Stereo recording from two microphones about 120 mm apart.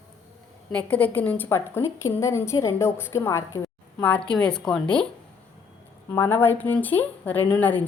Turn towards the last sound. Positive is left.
turn(degrees=15)  # may be behind; listen again after turning